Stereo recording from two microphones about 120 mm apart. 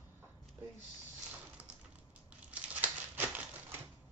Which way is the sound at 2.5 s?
10° right (ahead or behind).